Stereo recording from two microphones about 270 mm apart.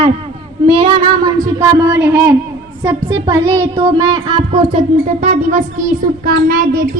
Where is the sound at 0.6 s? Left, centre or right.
Centre.